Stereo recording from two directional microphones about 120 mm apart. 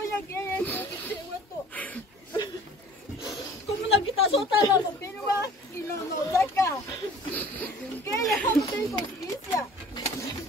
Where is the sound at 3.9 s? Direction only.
55° left (ahead or behind).